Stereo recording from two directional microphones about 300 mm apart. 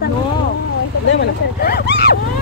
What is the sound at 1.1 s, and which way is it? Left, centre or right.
A woman's voice, left.